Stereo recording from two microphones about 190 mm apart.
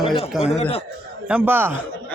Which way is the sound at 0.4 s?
35° left (ahead or behind).